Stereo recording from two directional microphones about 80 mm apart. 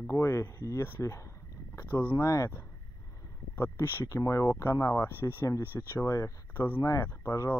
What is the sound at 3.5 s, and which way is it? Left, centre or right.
Speech, left.